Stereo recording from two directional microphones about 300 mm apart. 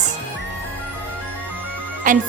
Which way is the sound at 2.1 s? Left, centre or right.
Right.